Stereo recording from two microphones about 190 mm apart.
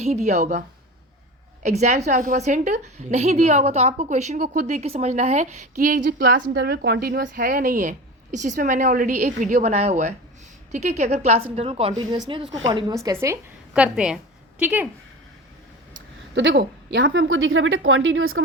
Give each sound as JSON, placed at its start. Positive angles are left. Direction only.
{"t": 0.3, "sound": "a woman's voice", "side_deg": -40}
{"t": 1.6, "sound": "a woman's voice", "side_deg": -35}
{"t": 7.2, "sound": "a woman's voice", "side_deg": -45}
{"t": 16.3, "sound": "a woman's voice", "side_deg": -75}